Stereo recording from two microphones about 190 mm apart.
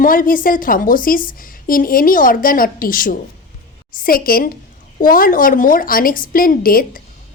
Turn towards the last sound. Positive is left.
turn(degrees=50)  # may be behind; listen again after turning